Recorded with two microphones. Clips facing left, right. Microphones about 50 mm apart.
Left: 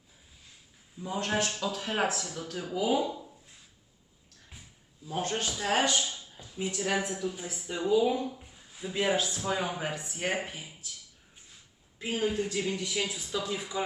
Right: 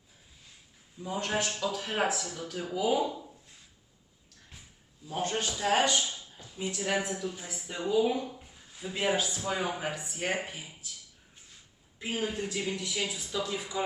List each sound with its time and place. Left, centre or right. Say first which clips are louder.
1.0 s speech: left 1 dB; centre
5.0 s speech: even; centre
11.9 s speech: left 3 dB; centre